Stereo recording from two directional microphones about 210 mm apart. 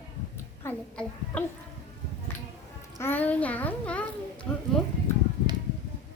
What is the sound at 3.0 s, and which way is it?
A child's voice, 10° left (ahead or behind).